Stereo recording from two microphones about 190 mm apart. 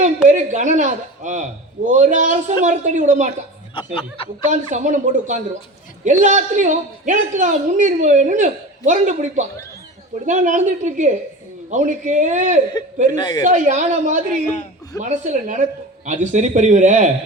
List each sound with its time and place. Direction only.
0.0 s a man's voice: 40° right (ahead or behind)
4.4 s a man's voice: 40° right (ahead or behind)
13.1 s speech: 20° left (ahead or behind)
13.4 s a man's voice: 40° right (ahead or behind)